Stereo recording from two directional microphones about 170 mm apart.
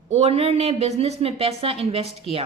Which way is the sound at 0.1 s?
40° right (ahead or behind).